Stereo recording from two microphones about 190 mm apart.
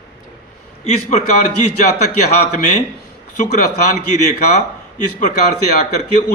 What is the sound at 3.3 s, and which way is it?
A man's voice, 40° left (ahead or behind).